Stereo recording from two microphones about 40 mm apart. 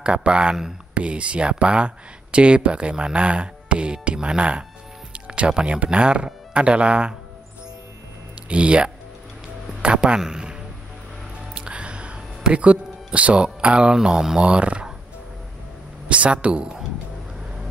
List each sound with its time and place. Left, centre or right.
0.0 s speech: right
8.5 s speech: right
9.9 s speech: centre
11.5 s speech: right
16.1 s speech: right